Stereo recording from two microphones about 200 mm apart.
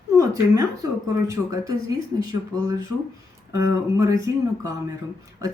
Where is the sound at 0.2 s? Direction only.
20° right (ahead or behind).